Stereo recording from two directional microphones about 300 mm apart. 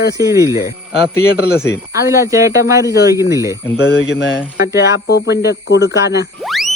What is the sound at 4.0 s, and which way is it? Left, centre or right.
Speech, left.